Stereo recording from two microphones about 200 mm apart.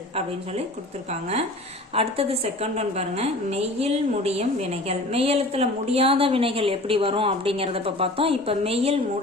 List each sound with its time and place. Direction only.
2.0 s a woman's voice: 30° right (ahead or behind)